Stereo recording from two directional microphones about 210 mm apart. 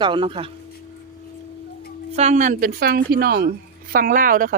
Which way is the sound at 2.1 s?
30° right (ahead or behind).